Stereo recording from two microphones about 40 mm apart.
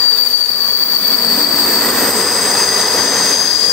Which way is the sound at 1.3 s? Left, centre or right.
Left.